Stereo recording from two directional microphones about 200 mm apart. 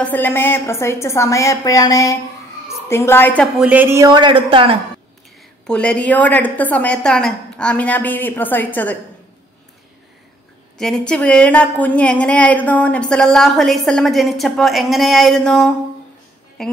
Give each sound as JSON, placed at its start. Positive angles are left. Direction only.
{"t": 0.0, "sound": "a woman's voice", "side_deg": 10}
{"t": 3.5, "sound": "a man's voice", "side_deg": -5}
{"t": 5.7, "sound": "a woman's voice", "side_deg": 5}
{"t": 10.8, "sound": "a woman's voice", "side_deg": 5}